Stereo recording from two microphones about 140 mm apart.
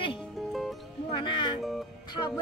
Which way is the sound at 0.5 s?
Centre (ahead or behind).